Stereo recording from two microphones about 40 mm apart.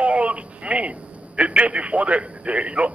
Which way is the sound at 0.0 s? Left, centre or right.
Right.